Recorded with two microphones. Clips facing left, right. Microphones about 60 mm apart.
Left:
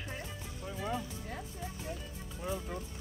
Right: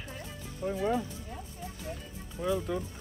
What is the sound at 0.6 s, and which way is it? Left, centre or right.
Speech, right.